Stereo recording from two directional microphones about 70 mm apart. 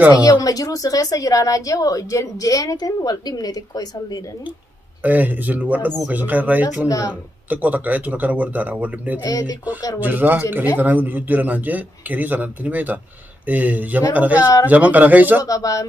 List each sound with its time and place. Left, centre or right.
0.2 s a woman's voice: left
5.0 s a man's voice: right
6.9 s a woman's voice: left
7.4 s a man's voice: right
9.2 s a woman's voice: left
9.9 s a man's voice: right
15.4 s a woman's voice: left